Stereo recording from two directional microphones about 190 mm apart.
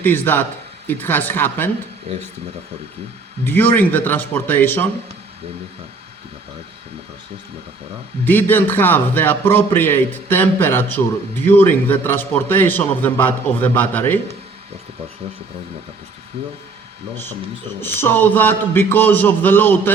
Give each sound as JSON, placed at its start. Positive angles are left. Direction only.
{"t": 0.0, "sound": "a man's voice", "side_deg": 10}
{"t": 2.1, "sound": "speech", "side_deg": -30}
{"t": 3.4, "sound": "a man's voice", "side_deg": 10}
{"t": 8.2, "sound": "a man's voice", "side_deg": 10}
{"t": 16.4, "sound": "speech", "side_deg": -30}
{"t": 17.7, "sound": "a man's voice", "side_deg": 10}